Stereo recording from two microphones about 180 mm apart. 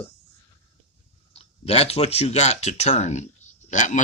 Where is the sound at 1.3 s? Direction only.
35° left (ahead or behind).